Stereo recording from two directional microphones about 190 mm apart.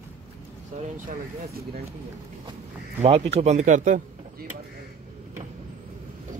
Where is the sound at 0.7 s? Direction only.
40° right (ahead or behind).